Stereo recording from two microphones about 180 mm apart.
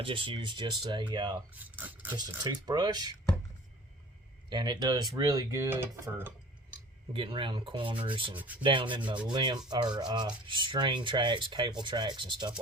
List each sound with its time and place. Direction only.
0.0 s rub: 30° right (ahead or behind)
1.5 s speech: 10° right (ahead or behind)
2.4 s rub: 25° right (ahead or behind)
4.4 s rub: 25° right (ahead or behind)
7.1 s rub: 30° right (ahead or behind)